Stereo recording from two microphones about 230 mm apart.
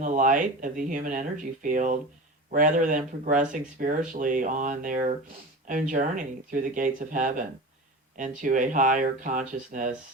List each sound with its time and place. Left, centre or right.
0.0 s speech: right